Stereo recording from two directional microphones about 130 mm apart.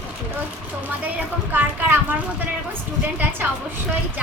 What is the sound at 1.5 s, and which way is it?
Speech, 15° right (ahead or behind).